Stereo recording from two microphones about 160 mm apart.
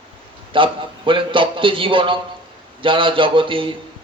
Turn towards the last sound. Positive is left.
turn(degrees=-30)  # may be behind; listen again after turning